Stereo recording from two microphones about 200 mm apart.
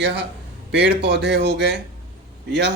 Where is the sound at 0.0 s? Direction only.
60° right (ahead or behind).